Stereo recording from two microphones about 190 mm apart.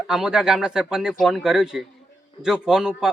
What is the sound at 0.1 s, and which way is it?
A man's voice, centre (ahead or behind).